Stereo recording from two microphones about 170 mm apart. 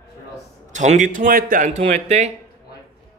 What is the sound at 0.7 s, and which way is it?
A man's voice, 45° right (ahead or behind).